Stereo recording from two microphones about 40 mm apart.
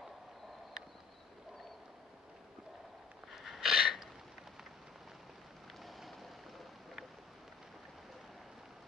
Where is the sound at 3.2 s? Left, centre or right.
Centre.